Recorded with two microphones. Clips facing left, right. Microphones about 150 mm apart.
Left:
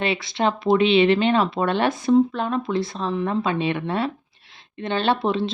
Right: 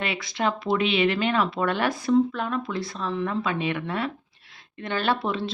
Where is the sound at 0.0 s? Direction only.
25° left (ahead or behind).